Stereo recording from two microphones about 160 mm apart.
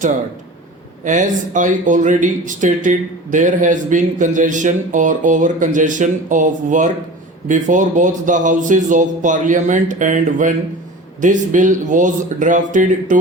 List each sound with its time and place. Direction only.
1.0 s speech: 50° right (ahead or behind)